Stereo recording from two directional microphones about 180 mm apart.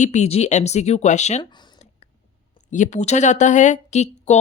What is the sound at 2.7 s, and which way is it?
Speech, 40° left (ahead or behind).